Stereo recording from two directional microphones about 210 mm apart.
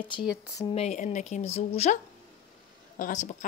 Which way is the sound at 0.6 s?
25° left (ahead or behind).